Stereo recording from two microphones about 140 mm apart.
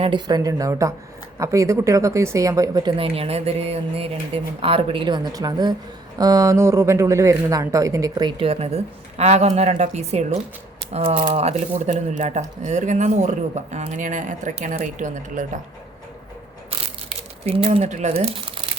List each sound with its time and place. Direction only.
0.0 s speech: 35° right (ahead or behind)
3.0 s speech: 45° right (ahead or behind); by 15.4 s 65° right (ahead or behind)
17.1 s speech: 45° right (ahead or behind)